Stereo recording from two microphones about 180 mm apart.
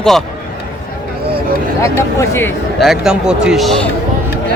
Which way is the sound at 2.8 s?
5° right (ahead or behind).